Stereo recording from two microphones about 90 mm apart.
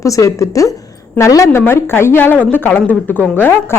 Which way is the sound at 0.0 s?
35° left (ahead or behind).